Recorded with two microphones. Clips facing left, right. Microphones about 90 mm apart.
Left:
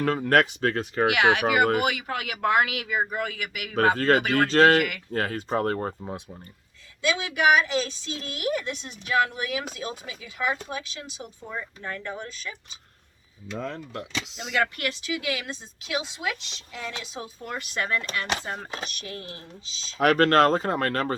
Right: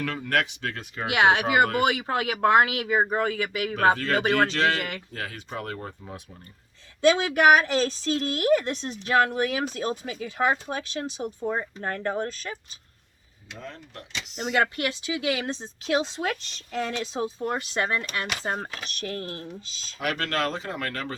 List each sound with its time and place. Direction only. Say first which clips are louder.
0.0 s speech: left 5 dB; 40° left (ahead or behind)
1.1 s a woman's voice: right 3 dB; 30° right (ahead or behind)
3.9 s speech: left 5 dB; 40° left (ahead or behind)
4.2 s speech: right 1 dB; 30° right (ahead or behind)
4.4 s speech: left 7 dB; 45° left (ahead or behind)
4.8 s a woman's voice: left 5 dB; 30° right (ahead or behind)
5.1 s speech: left 8 dB; 45° left (ahead or behind)
6.0 s speech: left 5 dB; 25° left (ahead or behind)
7.0 s a woman's voice: right 4 dB; 40° right (ahead or behind)
14.3 s a woman's voice: right 3 dB; 35° right (ahead or behind)
18.4 s a woman's voice: right 3 dB; 40° right (ahead or behind)
20.0 s speech: left 9 dB; 45° left (ahead or behind)